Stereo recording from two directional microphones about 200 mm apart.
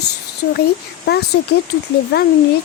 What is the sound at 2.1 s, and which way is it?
Speech, 55° left (ahead or behind).